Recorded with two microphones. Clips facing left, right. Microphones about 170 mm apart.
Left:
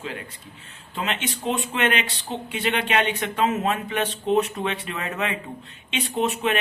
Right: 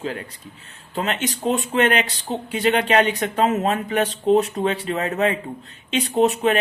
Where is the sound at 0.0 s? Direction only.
35° right (ahead or behind).